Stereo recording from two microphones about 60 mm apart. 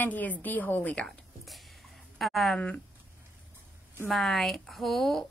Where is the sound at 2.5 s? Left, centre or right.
Centre.